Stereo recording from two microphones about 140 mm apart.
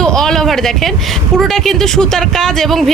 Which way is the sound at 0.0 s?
5° left (ahead or behind).